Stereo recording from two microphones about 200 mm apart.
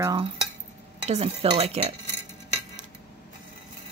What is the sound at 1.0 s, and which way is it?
Stir, 30° right (ahead or behind).